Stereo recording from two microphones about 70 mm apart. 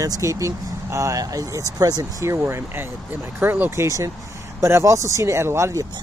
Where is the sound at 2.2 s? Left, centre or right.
Right.